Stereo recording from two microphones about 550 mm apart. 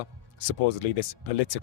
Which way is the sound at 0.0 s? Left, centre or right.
Left.